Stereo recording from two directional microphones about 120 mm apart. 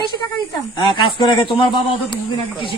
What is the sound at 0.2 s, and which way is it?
Speech, 20° left (ahead or behind).